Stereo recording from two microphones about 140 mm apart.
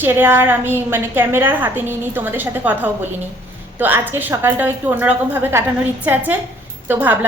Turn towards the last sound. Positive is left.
turn(degrees=-15)  # may be behind; listen again after turning